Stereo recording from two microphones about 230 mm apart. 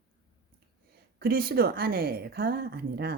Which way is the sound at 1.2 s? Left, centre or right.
Right.